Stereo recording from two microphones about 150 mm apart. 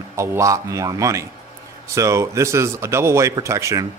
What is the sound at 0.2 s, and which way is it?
Speech, 20° right (ahead or behind).